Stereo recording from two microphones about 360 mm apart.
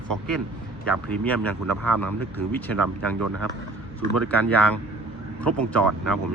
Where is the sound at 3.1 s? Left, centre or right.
Right.